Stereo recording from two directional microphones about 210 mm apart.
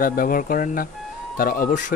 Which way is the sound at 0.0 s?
45° left (ahead or behind).